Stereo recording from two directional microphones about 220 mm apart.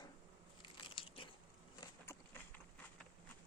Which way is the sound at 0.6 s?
20° left (ahead or behind).